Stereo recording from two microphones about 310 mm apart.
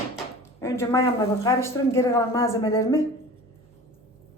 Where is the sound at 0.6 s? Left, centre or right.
Centre.